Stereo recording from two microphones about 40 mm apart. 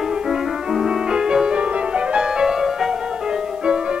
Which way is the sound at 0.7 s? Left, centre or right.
Centre.